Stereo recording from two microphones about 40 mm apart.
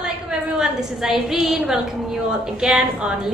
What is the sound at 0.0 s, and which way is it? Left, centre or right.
A woman's voice, centre.